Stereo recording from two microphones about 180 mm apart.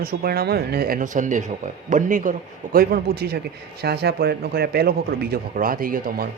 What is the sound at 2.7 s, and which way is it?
Speech, 60° right (ahead or behind).